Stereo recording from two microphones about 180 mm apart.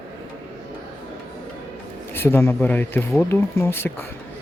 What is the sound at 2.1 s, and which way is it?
Speech, 15° left (ahead or behind).